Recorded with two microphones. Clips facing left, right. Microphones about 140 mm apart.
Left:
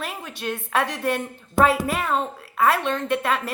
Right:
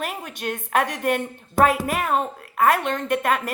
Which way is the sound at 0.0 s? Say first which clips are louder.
Right 2 dB; 45° right (ahead or behind).